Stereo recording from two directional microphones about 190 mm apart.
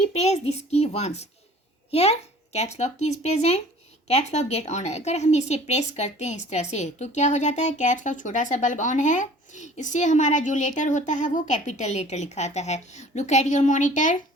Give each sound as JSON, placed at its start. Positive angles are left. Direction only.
{"t": 0.1, "sound": "speech", "side_deg": 35}